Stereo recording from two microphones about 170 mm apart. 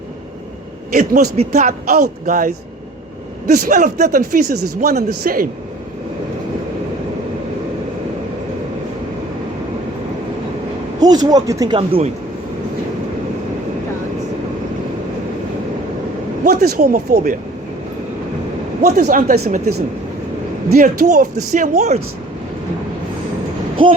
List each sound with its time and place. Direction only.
0.9 s a man's voice: 55° right (ahead or behind)
3.5 s speech: 50° right (ahead or behind)
11.0 s speech: 25° right (ahead or behind)
16.4 s speech: 60° right (ahead or behind)
18.8 s speech: 45° right (ahead or behind)
20.7 s speech: 55° right (ahead or behind)